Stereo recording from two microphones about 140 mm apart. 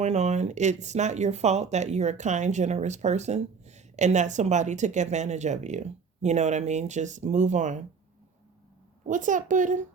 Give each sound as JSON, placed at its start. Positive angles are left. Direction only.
{"t": 0.0, "sound": "speech", "side_deg": -55}
{"t": 9.0, "sound": "speech", "side_deg": -65}